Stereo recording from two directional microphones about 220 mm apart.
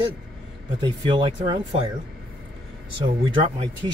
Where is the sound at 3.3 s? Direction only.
20° right (ahead or behind).